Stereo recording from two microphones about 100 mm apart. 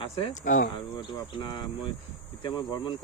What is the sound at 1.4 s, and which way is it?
Speech, 55° left (ahead or behind).